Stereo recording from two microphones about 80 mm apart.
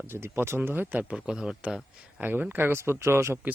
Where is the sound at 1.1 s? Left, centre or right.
Centre.